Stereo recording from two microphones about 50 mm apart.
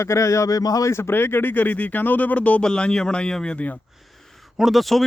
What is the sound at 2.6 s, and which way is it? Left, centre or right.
Speech, centre.